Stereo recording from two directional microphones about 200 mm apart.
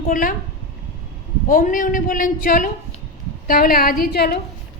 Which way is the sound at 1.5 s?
40° left (ahead or behind).